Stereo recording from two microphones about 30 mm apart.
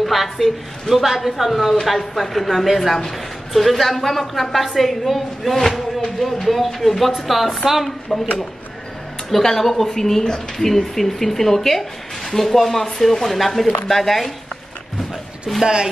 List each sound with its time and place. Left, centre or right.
0.0 s a woman's voice: centre
9.3 s a woman's voice: centre
15.5 s a woman's voice: centre